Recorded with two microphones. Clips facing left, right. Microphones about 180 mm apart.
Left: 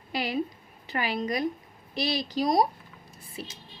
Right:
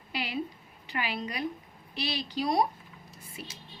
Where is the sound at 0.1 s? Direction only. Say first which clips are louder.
Left 5 dB; 45° left (ahead or behind).